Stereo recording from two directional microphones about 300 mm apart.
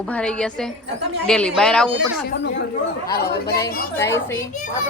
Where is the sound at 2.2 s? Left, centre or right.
Left.